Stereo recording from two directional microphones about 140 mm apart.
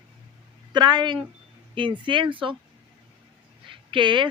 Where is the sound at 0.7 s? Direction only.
30° right (ahead or behind).